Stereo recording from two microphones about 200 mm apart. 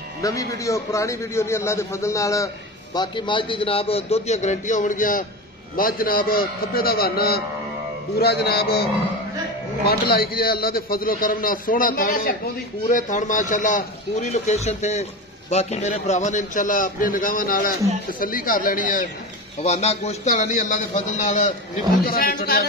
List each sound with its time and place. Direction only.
0.2 s a man's voice: 15° left (ahead or behind); by 8.8 s 55° left (ahead or behind)
9.8 s a man's voice: 50° left (ahead or behind)
22.0 s a man's voice: 45° left (ahead or behind)